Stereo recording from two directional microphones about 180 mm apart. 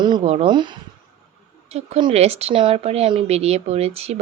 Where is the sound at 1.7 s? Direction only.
35° right (ahead or behind).